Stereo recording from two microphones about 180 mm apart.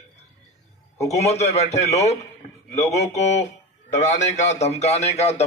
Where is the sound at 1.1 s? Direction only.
35° left (ahead or behind).